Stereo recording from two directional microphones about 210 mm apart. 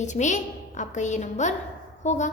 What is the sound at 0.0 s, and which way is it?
A woman's voice, 35° left (ahead or behind).